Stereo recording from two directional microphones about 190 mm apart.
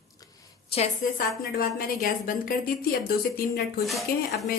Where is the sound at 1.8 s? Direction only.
50° left (ahead or behind).